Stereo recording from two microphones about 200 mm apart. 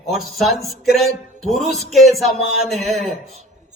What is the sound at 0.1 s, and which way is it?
A man's voice, centre (ahead or behind).